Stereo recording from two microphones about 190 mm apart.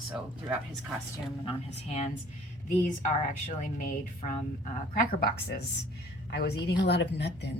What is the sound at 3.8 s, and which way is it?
Speech, 45° left (ahead or behind).